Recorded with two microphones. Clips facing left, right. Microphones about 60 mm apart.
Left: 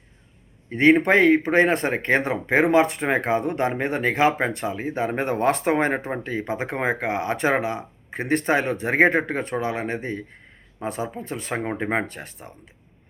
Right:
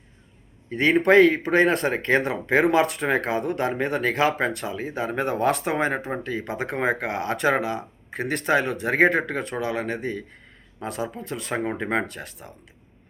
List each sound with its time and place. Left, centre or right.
0.7 s speech: left